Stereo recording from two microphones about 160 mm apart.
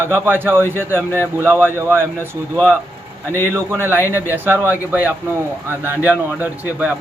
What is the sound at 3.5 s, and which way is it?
Speech, 15° right (ahead or behind).